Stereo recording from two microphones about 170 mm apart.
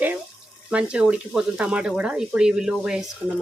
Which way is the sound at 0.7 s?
5° right (ahead or behind).